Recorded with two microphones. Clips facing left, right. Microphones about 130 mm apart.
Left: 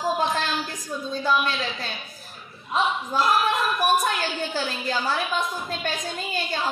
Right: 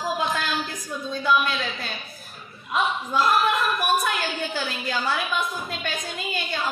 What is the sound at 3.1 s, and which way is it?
Speech, 40° left (ahead or behind).